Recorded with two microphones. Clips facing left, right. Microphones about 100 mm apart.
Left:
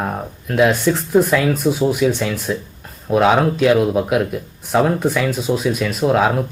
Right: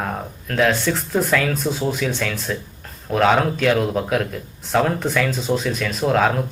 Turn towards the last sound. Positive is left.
turn(degrees=5)  # may be behind; listen again after turning